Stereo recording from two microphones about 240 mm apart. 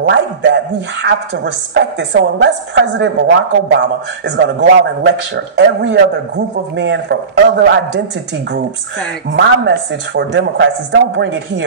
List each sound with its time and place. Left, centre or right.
0.0 s a man's voice: right
4.6 s a man's voice: right
9.3 s a man's voice: right